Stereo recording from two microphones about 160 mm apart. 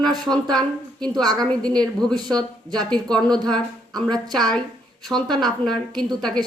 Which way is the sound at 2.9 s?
5° left (ahead or behind).